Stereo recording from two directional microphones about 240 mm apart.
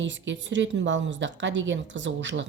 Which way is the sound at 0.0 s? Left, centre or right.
Right.